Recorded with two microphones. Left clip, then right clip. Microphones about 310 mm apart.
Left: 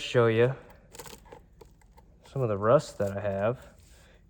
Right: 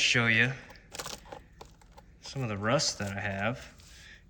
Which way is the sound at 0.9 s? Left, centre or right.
Centre.